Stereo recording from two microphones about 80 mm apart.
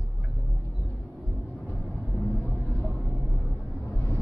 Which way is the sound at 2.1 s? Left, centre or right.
Centre.